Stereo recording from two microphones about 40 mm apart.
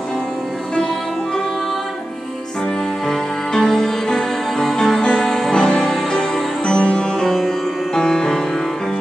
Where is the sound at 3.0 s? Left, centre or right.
Centre.